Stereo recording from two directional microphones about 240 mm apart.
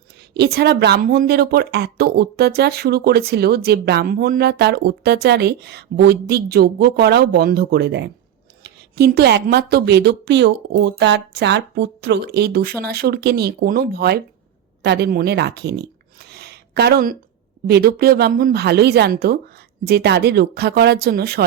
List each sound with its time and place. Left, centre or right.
0.3 s speech: right